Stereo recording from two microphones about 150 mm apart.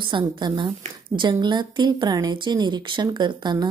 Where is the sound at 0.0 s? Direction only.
30° right (ahead or behind).